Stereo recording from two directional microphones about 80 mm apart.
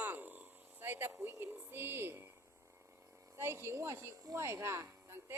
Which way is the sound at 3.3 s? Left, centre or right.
Right.